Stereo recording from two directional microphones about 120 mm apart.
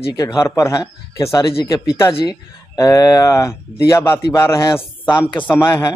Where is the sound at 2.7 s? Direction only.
30° left (ahead or behind).